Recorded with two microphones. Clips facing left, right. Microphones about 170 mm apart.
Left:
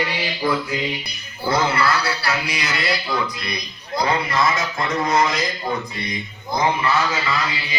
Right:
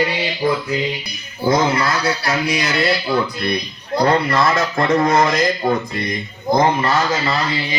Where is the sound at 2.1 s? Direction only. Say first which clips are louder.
Right 5 dB; 50° right (ahead or behind).